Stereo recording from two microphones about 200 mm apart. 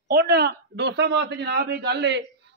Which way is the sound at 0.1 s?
50° right (ahead or behind).